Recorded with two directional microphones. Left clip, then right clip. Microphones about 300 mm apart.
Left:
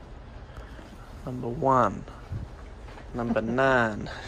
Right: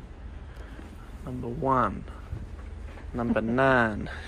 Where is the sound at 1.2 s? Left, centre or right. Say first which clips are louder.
Left 3 dB; centre.